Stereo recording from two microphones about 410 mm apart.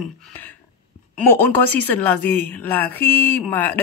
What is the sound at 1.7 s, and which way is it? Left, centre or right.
Speech, centre.